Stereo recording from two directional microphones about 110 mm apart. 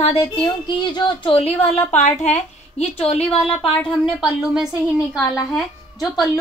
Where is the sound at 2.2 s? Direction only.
90° left.